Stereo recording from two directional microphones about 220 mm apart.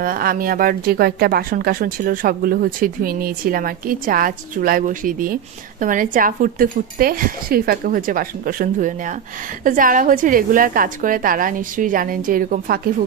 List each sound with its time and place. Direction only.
0.0 s speech: 40° right (ahead or behind)